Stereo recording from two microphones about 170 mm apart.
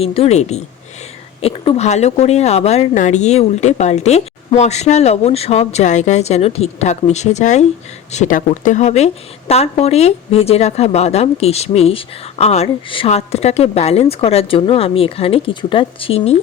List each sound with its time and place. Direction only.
0.0 s speech: 35° left (ahead or behind)